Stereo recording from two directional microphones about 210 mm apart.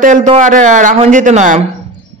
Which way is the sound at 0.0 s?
35° right (ahead or behind).